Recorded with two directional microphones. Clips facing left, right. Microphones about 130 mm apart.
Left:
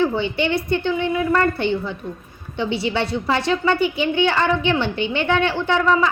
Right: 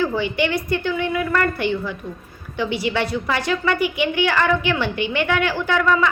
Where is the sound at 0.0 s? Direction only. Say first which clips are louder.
Left 1 dB; 25° left (ahead or behind).